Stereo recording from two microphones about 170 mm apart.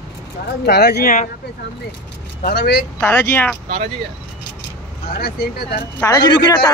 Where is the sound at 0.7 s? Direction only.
70° left (ahead or behind).